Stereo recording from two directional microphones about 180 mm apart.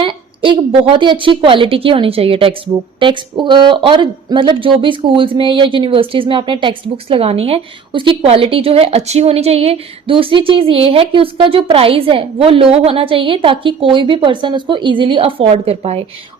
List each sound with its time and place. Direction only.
0.0 s speech: 25° right (ahead or behind)